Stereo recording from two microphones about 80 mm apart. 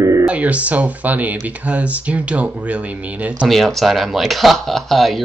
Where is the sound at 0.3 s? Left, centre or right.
Centre.